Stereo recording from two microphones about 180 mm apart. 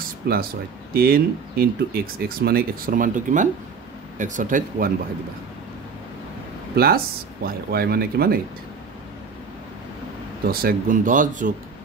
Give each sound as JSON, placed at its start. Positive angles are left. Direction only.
{"t": 0.2, "sound": "speech", "side_deg": -60}
{"t": 6.7, "sound": "speech", "side_deg": -60}
{"t": 10.5, "sound": "speech", "side_deg": -55}